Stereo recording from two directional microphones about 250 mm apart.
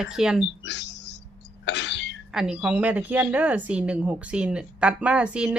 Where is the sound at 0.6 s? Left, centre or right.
Left.